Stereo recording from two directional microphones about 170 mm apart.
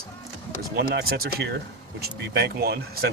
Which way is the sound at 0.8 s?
65° right (ahead or behind).